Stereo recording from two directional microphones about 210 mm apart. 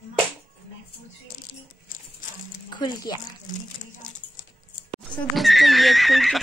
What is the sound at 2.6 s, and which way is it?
Speech, 20° left (ahead or behind).